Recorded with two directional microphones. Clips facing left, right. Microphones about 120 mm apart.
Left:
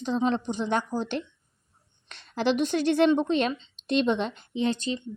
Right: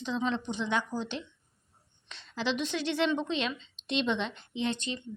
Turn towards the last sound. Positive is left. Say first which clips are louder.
# left 6 dB
turn(degrees=35)  # may be behind; listen again after turning